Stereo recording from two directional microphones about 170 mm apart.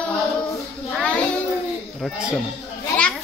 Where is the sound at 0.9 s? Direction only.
5° left (ahead or behind).